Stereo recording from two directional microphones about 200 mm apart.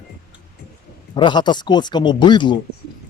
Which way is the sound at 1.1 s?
20° left (ahead or behind).